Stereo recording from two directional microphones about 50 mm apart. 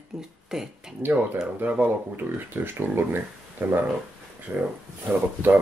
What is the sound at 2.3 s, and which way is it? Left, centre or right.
Speech, right.